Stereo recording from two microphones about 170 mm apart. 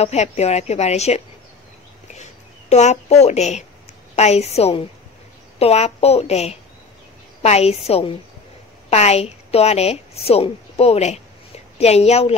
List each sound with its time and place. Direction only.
0.0 s a woman's voice: 40° left (ahead or behind)
2.7 s a woman's voice: 40° left (ahead or behind)